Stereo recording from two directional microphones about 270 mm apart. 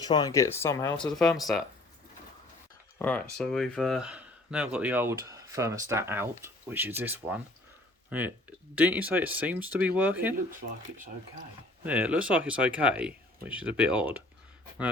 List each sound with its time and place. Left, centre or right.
0.0 s speech: centre
3.0 s speech: centre
10.6 s speech: right
11.8 s speech: centre